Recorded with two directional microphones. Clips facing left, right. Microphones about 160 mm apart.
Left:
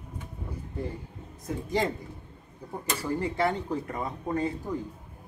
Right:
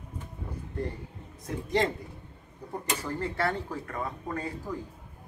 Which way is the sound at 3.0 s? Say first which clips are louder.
Left 5 dB; 10° left (ahead or behind).